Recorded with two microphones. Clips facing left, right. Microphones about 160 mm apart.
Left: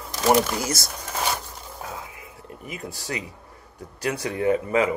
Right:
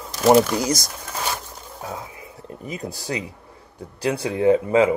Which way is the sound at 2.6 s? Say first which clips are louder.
Right 4 dB; 35° right (ahead or behind).